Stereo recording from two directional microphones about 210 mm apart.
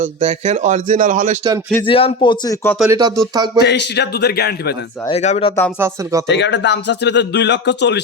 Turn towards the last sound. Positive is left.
turn(degrees=55)  # may be behind; listen again after turning